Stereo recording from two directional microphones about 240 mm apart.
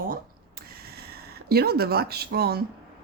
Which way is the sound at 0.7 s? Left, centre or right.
Right.